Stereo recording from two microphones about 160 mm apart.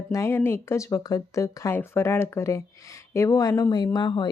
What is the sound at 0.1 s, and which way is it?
Speech, 15° left (ahead or behind).